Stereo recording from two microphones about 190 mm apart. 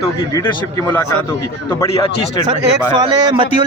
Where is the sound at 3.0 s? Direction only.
20° right (ahead or behind).